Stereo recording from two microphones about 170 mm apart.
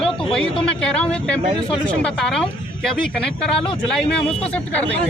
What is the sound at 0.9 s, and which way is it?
Speech, 5° left (ahead or behind).